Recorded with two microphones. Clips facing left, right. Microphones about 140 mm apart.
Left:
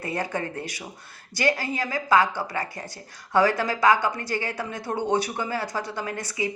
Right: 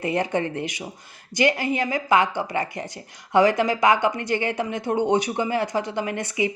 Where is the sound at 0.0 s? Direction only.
20° right (ahead or behind).